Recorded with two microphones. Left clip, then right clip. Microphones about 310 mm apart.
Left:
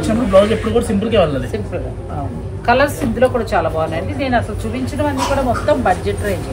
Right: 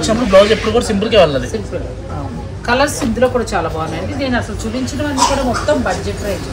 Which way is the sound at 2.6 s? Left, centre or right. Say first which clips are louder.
Left 1 dB; centre.